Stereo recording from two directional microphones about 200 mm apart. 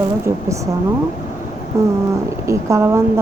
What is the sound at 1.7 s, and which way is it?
Speech, 15° right (ahead or behind).